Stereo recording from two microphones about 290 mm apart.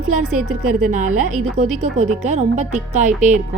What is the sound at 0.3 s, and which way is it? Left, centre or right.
Speech, centre.